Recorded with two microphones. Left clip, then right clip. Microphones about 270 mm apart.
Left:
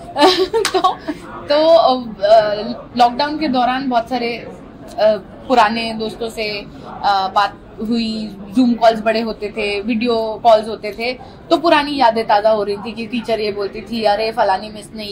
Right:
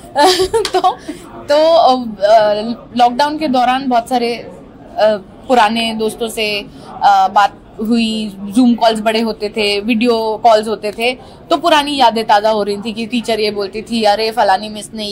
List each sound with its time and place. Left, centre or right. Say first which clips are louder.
0.1 s speech: right 2 dB; right